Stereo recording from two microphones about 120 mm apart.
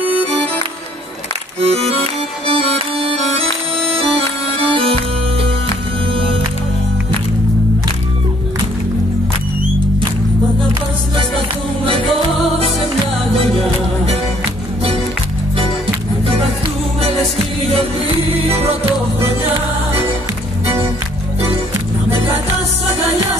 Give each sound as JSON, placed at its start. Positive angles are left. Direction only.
{"t": 1.6, "sound": "music", "side_deg": -55}
{"t": 3.2, "sound": "music", "side_deg": 5}
{"t": 4.6, "sound": "music", "side_deg": -50}